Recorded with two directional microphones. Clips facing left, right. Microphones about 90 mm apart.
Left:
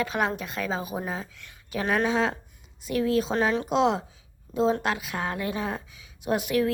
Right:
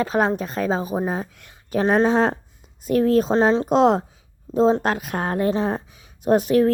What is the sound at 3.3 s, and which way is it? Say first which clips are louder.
Speech: right 7 dB; 30° right (ahead or behind).